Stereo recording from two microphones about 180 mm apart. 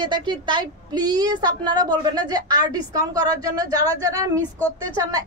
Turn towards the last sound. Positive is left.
turn(degrees=-20)  # may be behind; listen again after turning